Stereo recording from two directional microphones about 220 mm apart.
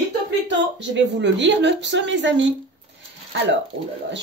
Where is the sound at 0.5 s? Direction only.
55° right (ahead or behind).